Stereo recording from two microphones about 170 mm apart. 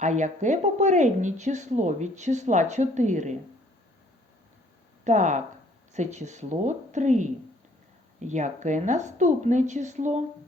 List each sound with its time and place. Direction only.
0.0 s speech: 45° right (ahead or behind)
5.0 s speech: 45° right (ahead or behind)